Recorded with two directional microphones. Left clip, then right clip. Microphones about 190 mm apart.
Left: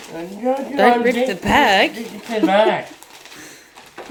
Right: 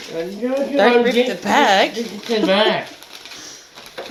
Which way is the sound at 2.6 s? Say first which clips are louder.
Left 1 dB; 20° left (ahead or behind).